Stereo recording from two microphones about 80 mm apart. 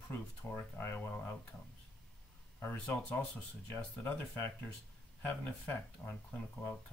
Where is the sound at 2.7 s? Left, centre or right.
Left.